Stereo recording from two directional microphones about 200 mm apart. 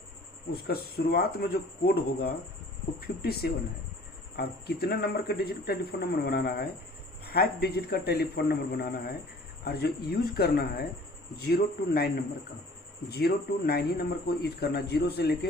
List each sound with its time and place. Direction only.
0.5 s a man's voice: 50° left (ahead or behind)